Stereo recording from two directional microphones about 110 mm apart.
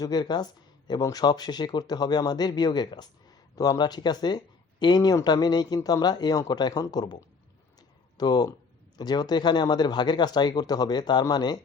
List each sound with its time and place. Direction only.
0.0 s speech: 40° left (ahead or behind)
7.8 s a sound: 40° left (ahead or behind)
9.0 s speech: 40° left (ahead or behind)